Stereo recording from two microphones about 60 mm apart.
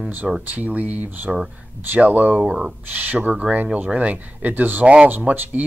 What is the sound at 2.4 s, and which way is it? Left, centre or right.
Speech, centre.